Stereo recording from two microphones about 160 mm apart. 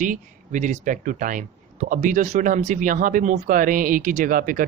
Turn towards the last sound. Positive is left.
turn(degrees=-60)  # may be behind; listen again after turning